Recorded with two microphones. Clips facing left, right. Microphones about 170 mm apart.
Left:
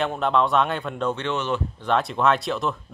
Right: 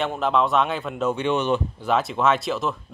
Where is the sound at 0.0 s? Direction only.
Centre (ahead or behind); by 1.9 s 15° right (ahead or behind).